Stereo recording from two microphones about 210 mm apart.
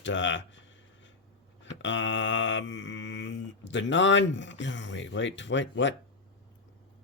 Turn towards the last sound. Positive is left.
turn(degrees=60)  # may be behind; listen again after turning